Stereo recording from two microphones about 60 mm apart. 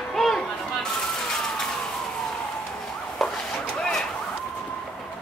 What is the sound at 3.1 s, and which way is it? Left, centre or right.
Emergency vehicle, centre.